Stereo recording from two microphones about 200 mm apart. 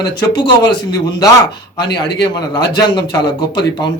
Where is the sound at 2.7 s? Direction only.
20° left (ahead or behind).